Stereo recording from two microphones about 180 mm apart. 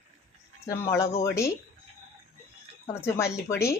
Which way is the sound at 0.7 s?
15° left (ahead or behind).